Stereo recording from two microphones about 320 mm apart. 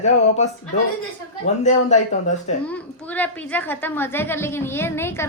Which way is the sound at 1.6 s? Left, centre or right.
Left.